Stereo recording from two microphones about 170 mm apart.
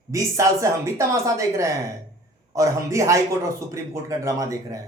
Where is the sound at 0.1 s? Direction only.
15° right (ahead or behind).